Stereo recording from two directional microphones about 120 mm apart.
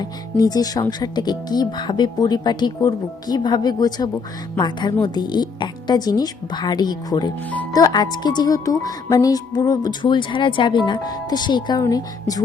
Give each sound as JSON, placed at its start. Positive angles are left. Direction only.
{"t": 0.0, "sound": "speech", "side_deg": 35}